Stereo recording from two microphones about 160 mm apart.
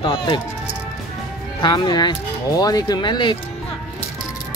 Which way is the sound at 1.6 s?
30° left (ahead or behind).